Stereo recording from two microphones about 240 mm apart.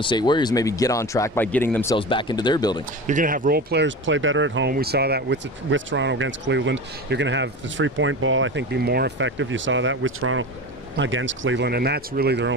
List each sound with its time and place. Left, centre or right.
0.0 s speech: centre
2.0 s speech: left
3.1 s speech: right
4.7 s speech: right